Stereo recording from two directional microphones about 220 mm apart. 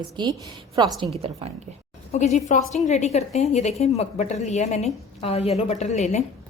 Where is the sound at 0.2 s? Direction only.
20° right (ahead or behind).